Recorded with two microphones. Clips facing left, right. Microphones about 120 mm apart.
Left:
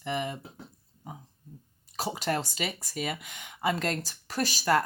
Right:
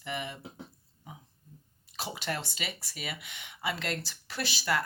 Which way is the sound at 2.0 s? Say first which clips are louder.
Left 6 dB; 40° left (ahead or behind).